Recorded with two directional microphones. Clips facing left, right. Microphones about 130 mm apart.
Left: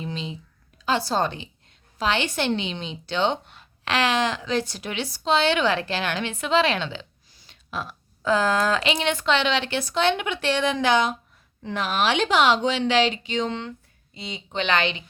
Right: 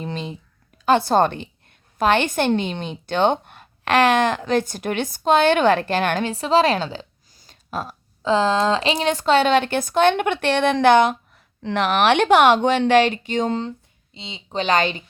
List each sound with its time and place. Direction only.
0.0 s a sound: 50° right (ahead or behind)
0.9 s a woman's voice: 55° right (ahead or behind)
6.3 s a woman's voice: 35° right (ahead or behind)
8.2 s speech: 25° right (ahead or behind)
14.1 s speech: 25° right (ahead or behind)
14.5 s speech: 40° right (ahead or behind)